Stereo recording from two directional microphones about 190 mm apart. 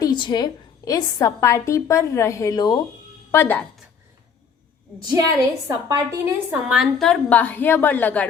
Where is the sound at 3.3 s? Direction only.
10° left (ahead or behind).